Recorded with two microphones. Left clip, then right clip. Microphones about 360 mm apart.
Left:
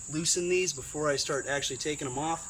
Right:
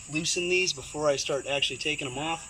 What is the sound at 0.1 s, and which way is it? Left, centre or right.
Speech, centre.